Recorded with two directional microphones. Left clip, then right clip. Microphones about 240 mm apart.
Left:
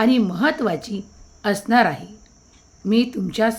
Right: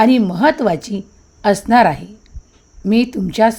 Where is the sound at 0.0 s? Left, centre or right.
Right.